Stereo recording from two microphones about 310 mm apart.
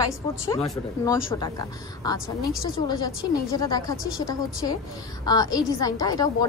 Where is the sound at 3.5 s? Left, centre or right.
Centre.